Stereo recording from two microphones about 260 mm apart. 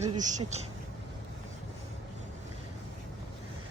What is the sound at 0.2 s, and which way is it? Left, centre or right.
Speech, right.